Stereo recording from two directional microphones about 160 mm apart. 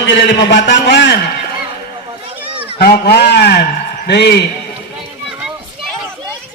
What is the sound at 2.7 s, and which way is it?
Speech, 80° left.